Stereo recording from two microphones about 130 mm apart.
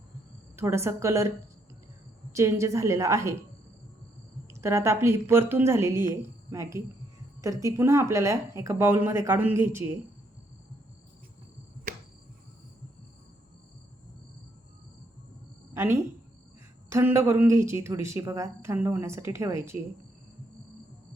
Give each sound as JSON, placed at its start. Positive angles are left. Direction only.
{"t": 0.5, "sound": "a woman's voice", "side_deg": -20}
{"t": 2.3, "sound": "a woman's voice", "side_deg": -20}
{"t": 4.4, "sound": "a woman's voice", "side_deg": -20}
{"t": 15.7, "sound": "a woman's voice", "side_deg": -20}